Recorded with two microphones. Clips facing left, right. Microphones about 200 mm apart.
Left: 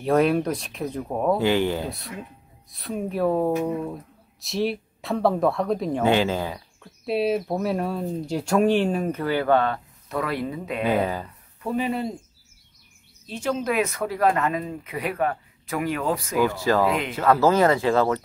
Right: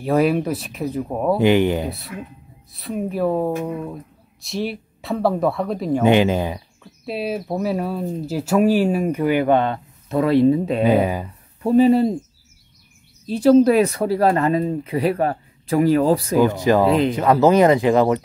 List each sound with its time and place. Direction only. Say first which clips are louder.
0.0 s speech: right 2 dB; 5° right (ahead or behind)
1.4 s speech: right 6 dB; 20° right (ahead or behind)
1.9 s speech: right 4 dB; centre (ahead or behind)
6.0 s speech: right 5 dB; 15° right (ahead or behind)
6.8 s speech: left 4 dB; centre (ahead or behind); by 10.8 s 30° right (ahead or behind)
10.8 s speech: right 6 dB; 15° right (ahead or behind)
11.6 s speech: right 11 dB; 35° right (ahead or behind)
13.3 s speech: right 13 dB; 35° right (ahead or behind)
16.3 s speech: right 3 dB; 20° right (ahead or behind)
16.8 s speech: right 7 dB; 35° right (ahead or behind)
17.1 s speech: right 4 dB; 15° right (ahead or behind)